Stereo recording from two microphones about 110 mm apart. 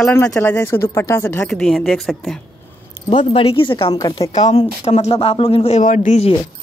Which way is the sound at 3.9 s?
35° left (ahead or behind).